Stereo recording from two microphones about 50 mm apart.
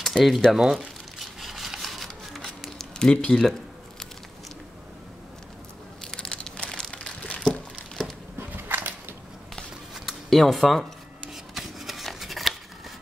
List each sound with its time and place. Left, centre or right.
0.0 s a sound: centre
0.5 s speech: centre
0.7 s crumpling: centre
2.8 s speech: centre
6.1 s crumpling: centre
6.9 s a sound: centre
8.4 s a sound: right
10.0 s speech: centre
11.5 s scissors: centre